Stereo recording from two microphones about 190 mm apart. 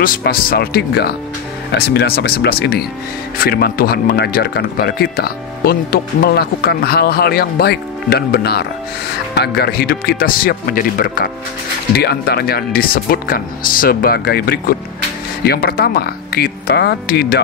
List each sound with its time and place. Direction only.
0.0 s speech: 50° left (ahead or behind)